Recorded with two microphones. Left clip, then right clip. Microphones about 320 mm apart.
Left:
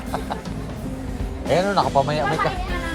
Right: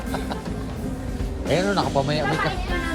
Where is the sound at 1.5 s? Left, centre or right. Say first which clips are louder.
Left 3 dB; centre.